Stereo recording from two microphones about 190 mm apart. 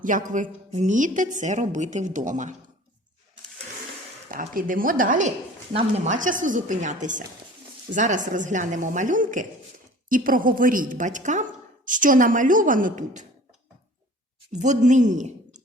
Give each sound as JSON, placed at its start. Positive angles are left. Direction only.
{"t": 0.0, "sound": "a woman's voice", "side_deg": -45}
{"t": 4.3, "sound": "a woman's voice", "side_deg": -45}
{"t": 14.6, "sound": "a woman's voice", "side_deg": -40}